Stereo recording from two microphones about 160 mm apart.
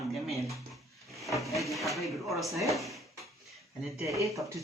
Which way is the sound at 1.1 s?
Centre (ahead or behind).